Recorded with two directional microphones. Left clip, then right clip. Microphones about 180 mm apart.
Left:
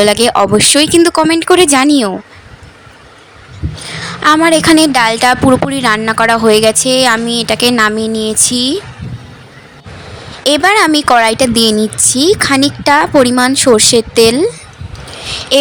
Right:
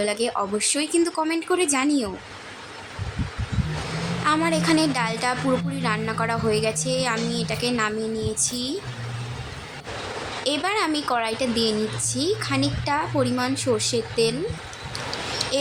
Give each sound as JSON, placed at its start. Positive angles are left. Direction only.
{"t": 0.0, "sound": "a woman's voice", "side_deg": 60}
{"t": 4.2, "sound": "a woman's voice", "side_deg": 55}
{"t": 10.4, "sound": "a woman's voice", "side_deg": 60}